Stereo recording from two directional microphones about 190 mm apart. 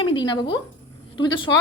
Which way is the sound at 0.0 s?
25° left (ahead or behind).